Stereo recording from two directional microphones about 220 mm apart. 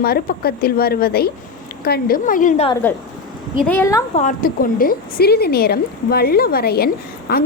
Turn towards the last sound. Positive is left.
turn(degrees=45)  # may be behind; listen again after turning